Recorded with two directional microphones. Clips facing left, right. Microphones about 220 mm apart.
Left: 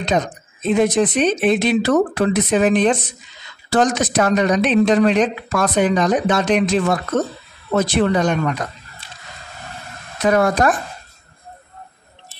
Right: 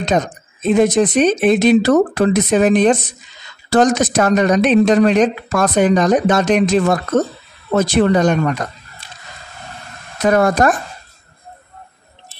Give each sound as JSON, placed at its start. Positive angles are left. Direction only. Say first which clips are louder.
{"t": 0.0, "sound": "speech", "louder": "right 2 dB", "side_deg": -45}
{"t": 10.2, "sound": "speech", "louder": "right 2 dB", "side_deg": -45}